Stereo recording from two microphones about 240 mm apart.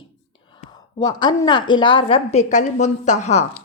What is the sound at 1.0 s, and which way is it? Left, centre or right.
A woman's voice, centre.